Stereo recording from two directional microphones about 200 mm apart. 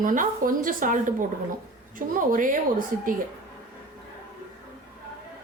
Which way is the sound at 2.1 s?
40° right (ahead or behind).